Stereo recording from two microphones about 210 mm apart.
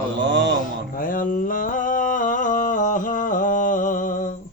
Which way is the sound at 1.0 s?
40° left (ahead or behind).